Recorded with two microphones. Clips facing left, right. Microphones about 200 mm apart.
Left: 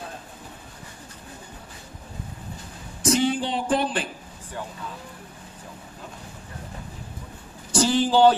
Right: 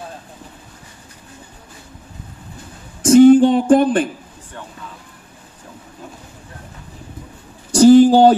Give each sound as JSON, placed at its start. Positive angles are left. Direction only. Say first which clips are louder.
{"t": 3.0, "sound": "speech", "louder": "right 15 dB", "side_deg": -50}
{"t": 7.7, "sound": "speech", "louder": "right 12 dB", "side_deg": -45}